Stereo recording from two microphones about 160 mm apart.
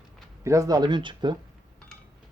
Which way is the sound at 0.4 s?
20° right (ahead or behind).